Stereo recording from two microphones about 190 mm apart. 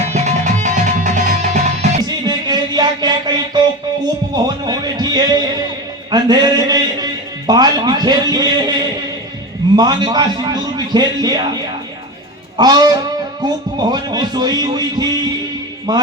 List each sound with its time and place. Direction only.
0.1 s music: 35° right (ahead or behind)
2.0 s music: 20° right (ahead or behind)
4.0 s speech: 20° right (ahead or behind)
12.5 s speech: 20° right (ahead or behind)